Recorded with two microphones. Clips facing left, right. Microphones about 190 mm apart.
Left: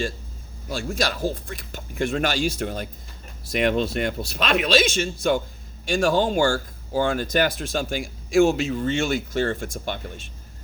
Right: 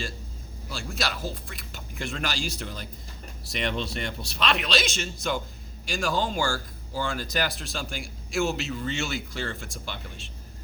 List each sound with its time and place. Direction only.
0.7 s speech: 45° left (ahead or behind)